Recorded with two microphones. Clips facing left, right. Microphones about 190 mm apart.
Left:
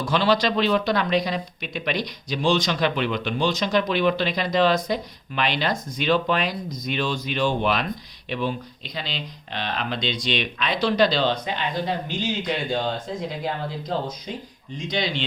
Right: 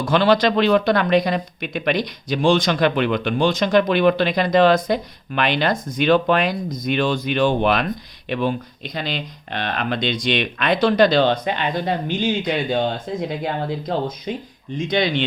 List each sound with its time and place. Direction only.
0.0 s speech: 55° right (ahead or behind)